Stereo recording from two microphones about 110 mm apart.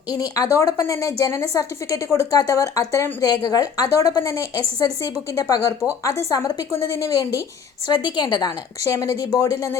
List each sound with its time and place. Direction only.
0.1 s speech: 35° left (ahead or behind)